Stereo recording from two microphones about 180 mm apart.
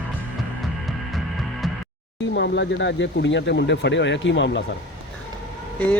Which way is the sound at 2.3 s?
70° left (ahead or behind).